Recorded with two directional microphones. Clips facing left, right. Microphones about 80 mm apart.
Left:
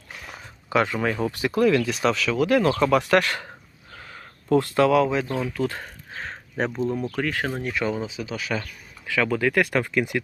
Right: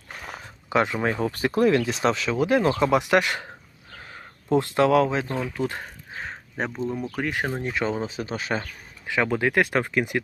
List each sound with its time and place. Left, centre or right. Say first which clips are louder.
0.2 s a sound: right 4 dB; right
0.7 s speech: even; right
6.1 s speech: left 3 dB; centre
7.2 s speech: left 1 dB; centre
8.0 s speech: right 1 dB; right